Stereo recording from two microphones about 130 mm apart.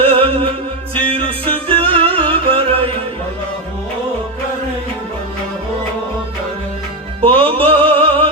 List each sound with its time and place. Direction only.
0.0 s music: 45° right (ahead or behind)
7.2 s music: 45° right (ahead or behind)